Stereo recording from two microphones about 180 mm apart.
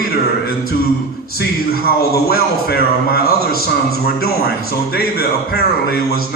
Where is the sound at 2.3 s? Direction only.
60° left (ahead or behind).